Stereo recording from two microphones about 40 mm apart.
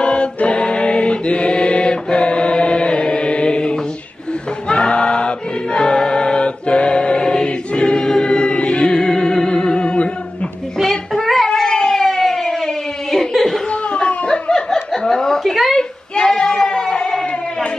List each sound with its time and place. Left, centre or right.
0.0 s mantra: left
4.6 s choir: left
10.8 s child singing: centre
11.4 s cat: centre
13.3 s chuckle: centre
13.7 s chuckle: left
15.4 s a sound: centre
15.8 s a sound: centre